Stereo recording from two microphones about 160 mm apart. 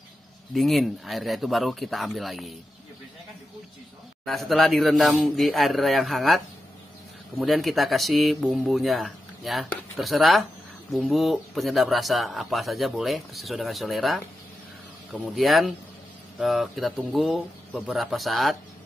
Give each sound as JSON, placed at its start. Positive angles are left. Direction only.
{"t": 0.6, "sound": "speech", "side_deg": 0}
{"t": 4.2, "sound": "speech", "side_deg": 0}